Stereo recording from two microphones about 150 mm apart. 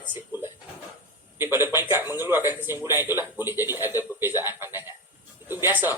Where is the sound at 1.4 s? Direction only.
15° right (ahead or behind).